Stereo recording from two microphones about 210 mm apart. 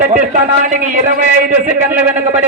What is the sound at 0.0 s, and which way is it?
A man's voice, 40° right (ahead or behind).